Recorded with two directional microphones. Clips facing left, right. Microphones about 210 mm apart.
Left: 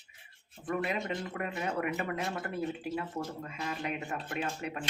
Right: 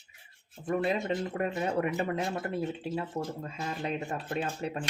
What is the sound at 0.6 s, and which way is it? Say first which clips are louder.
Speech: right 4 dB; 30° right (ahead or behind).